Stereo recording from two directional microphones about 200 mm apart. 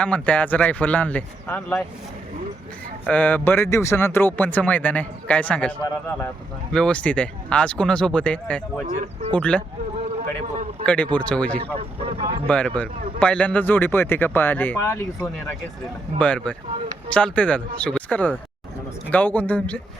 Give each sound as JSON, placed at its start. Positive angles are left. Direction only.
{"t": 0.0, "sound": "speech", "side_deg": 5}
{"t": 3.1, "sound": "speech", "side_deg": 10}
{"t": 10.0, "sound": "a man's voice", "side_deg": -35}
{"t": 10.8, "sound": "speech", "side_deg": 5}
{"t": 11.8, "sound": "speech", "side_deg": -25}
{"t": 12.5, "sound": "speech", "side_deg": 5}